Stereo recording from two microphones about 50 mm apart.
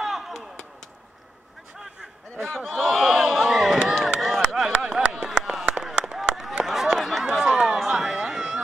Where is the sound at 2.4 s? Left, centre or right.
Centre.